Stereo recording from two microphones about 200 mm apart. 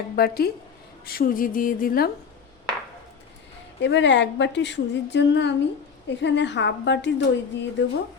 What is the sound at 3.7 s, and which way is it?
A woman's voice, 65° left (ahead or behind).